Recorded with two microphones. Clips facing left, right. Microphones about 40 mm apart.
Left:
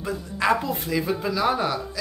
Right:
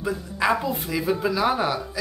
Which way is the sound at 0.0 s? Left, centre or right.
Centre.